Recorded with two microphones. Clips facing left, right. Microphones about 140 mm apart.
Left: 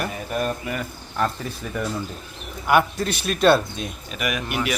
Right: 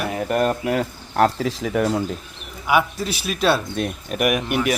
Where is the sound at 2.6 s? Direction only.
Centre (ahead or behind).